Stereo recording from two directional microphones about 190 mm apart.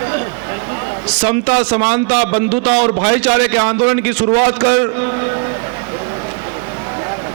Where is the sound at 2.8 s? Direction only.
15° right (ahead or behind).